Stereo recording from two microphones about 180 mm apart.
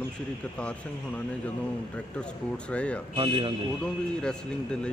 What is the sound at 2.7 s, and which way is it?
Speech, 5° left (ahead or behind).